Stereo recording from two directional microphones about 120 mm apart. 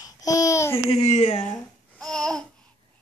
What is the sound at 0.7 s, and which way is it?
Speech, 60° left (ahead or behind).